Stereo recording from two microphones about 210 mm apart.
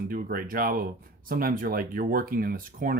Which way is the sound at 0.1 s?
45° right (ahead or behind).